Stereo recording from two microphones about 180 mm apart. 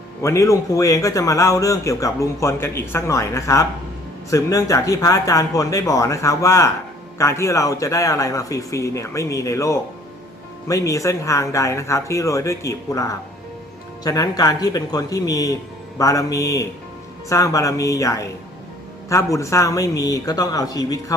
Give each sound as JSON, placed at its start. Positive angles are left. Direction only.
{"t": 0.2, "sound": "speech", "side_deg": 15}